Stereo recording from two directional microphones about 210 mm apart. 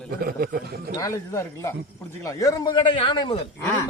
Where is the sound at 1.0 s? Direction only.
15° left (ahead or behind).